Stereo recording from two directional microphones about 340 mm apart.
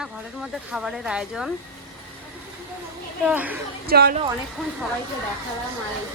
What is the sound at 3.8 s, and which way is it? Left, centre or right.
Speech, right.